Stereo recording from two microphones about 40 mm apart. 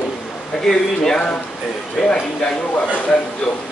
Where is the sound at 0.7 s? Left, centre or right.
Centre.